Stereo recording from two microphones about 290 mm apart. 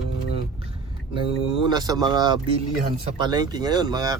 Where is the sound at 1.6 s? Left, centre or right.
Centre.